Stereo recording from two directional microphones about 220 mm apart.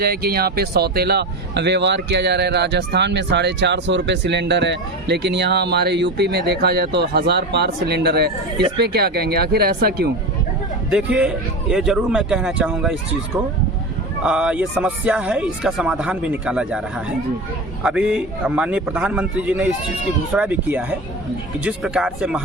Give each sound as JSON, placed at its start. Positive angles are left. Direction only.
{"t": 0.0, "sound": "a man's voice", "side_deg": -45}
{"t": 8.5, "sound": "speech", "side_deg": -20}
{"t": 8.8, "sound": "a man's voice", "side_deg": -45}
{"t": 10.9, "sound": "speech", "side_deg": -5}
{"t": 14.3, "sound": "speech", "side_deg": -5}
{"t": 17.8, "sound": "speech", "side_deg": -5}